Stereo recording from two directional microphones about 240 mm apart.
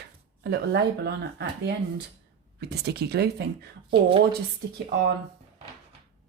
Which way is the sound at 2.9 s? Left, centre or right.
Right.